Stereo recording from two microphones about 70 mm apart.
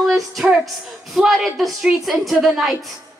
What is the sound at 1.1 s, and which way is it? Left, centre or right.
Speech, centre.